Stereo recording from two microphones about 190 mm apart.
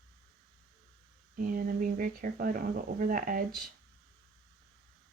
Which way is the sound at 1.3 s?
45° right (ahead or behind).